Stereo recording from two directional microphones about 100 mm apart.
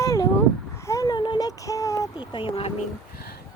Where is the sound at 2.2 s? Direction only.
55° left (ahead or behind).